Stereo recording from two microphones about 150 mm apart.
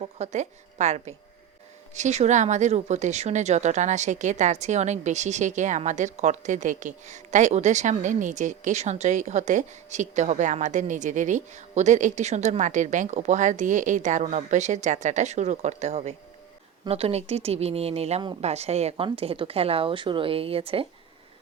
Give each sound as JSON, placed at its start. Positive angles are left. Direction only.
{"t": 0.0, "sound": "a woman's voice", "side_deg": -50}